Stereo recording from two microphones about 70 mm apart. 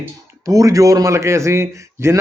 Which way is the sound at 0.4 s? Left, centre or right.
Right.